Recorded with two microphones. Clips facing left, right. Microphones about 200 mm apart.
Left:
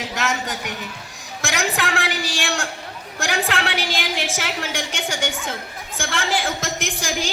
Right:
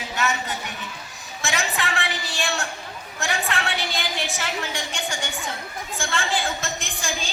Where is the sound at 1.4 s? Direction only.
90° left.